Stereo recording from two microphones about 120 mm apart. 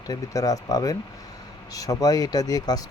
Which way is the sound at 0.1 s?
30° left (ahead or behind).